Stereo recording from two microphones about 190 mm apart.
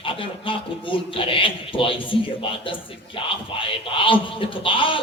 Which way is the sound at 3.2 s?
30° left (ahead or behind).